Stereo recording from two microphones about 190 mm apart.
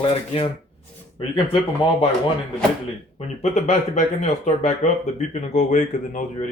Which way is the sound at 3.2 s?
35° left (ahead or behind).